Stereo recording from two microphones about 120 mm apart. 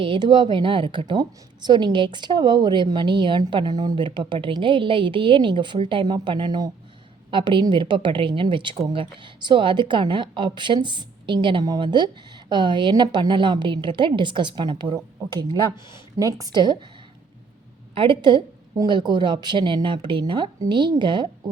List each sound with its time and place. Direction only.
0.0 s a woman's voice: 45° right (ahead or behind)
16.1 s speech: 30° right (ahead or behind)
17.9 s a woman's voice: 45° right (ahead or behind)